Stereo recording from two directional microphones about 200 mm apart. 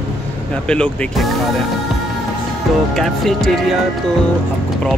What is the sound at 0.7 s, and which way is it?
Speech, centre (ahead or behind).